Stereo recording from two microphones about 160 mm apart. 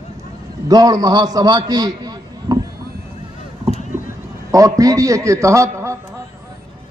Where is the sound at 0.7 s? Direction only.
20° right (ahead or behind).